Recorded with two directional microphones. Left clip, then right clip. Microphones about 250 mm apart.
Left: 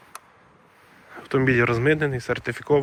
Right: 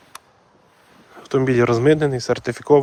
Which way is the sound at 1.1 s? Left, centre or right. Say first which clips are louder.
Right 2 dB; centre.